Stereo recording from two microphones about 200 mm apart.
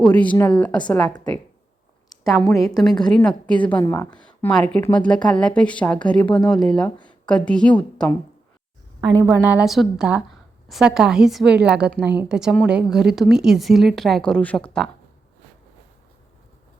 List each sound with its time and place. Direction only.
0.0 s a woman's voice: 5° left (ahead or behind)
2.0 s a sound: 15° left (ahead or behind)
2.6 s a woman's voice: 15° left (ahead or behind)
3.0 s a woman's voice: 5° left (ahead or behind)
9.0 s a woman's voice: 20° right (ahead or behind)
9.2 s speech: 10° right (ahead or behind)